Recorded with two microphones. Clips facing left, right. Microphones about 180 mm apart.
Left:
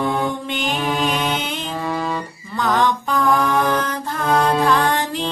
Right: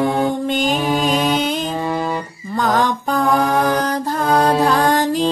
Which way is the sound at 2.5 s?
40° right (ahead or behind).